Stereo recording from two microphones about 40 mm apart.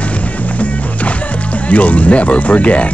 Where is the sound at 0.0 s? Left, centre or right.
Left.